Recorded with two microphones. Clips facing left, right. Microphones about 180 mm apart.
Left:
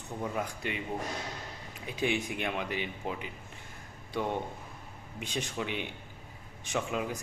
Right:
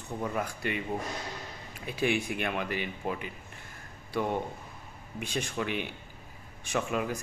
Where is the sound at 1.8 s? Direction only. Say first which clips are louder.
Right 2 dB; 20° left (ahead or behind).